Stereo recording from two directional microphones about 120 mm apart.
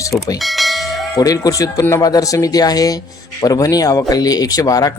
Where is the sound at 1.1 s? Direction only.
30° left (ahead or behind).